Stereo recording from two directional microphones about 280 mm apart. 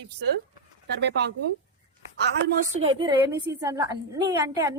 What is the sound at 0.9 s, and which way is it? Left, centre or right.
Speech, right.